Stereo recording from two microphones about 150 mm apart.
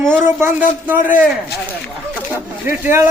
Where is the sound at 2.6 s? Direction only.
15° right (ahead or behind).